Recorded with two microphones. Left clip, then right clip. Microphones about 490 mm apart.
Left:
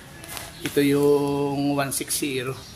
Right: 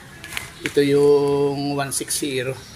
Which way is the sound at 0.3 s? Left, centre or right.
Left.